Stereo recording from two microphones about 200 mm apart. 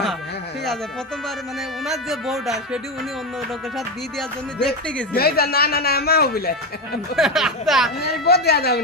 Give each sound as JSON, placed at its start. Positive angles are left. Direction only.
{"t": 1.9, "sound": "music", "side_deg": 0}
{"t": 4.2, "sound": "music", "side_deg": 5}
{"t": 5.1, "sound": "speech", "side_deg": 50}
{"t": 7.2, "sound": "music", "side_deg": 0}
{"t": 8.0, "sound": "speech", "side_deg": 55}